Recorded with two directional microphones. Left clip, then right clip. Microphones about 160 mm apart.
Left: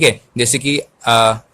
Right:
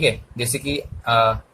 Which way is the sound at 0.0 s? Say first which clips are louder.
Left 7 dB; 40° left (ahead or behind).